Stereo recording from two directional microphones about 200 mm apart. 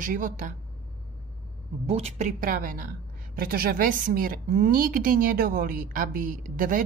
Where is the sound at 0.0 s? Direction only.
40° right (ahead or behind).